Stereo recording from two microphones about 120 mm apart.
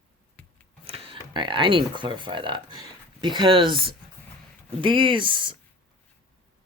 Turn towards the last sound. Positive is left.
turn(degrees=-45)  # may be behind; listen again after turning